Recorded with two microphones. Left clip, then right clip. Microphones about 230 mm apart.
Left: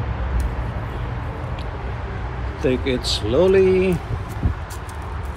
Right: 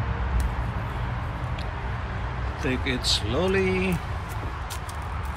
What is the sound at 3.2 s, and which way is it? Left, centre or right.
Speech, left.